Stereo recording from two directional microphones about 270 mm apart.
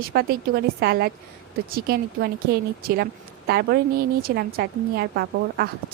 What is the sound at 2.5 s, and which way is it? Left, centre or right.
A woman's voice, right.